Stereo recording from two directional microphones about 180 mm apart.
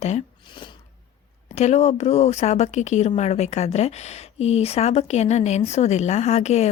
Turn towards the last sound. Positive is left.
turn(degrees=40)  # may be behind; listen again after turning